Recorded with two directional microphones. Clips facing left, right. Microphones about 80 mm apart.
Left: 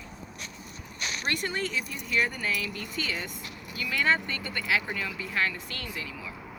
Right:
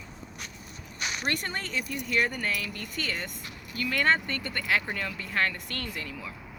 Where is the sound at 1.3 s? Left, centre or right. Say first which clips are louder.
Left 5 dB; right.